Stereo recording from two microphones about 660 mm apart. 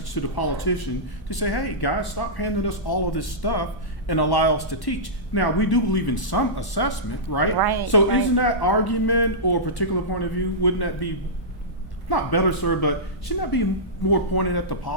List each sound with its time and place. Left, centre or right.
0.1 s speech: left
7.6 s speech: right
7.9 s speech: left